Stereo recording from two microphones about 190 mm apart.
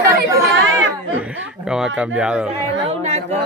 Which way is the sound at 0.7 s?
90° right.